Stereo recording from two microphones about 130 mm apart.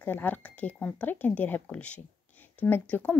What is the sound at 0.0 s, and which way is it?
Speech, 15° left (ahead or behind).